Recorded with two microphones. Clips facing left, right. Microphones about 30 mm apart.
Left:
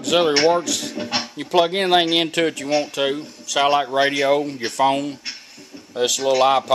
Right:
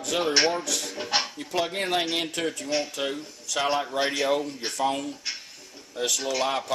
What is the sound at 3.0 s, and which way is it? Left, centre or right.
Speech, left.